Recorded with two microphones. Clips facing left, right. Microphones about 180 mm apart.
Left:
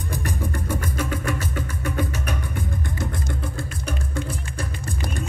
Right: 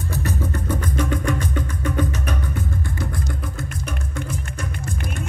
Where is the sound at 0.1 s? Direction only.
15° left (ahead or behind).